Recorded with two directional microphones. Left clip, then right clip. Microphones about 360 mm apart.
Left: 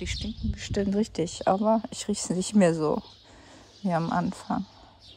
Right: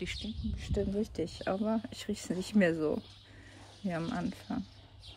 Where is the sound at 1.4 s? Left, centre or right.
Left.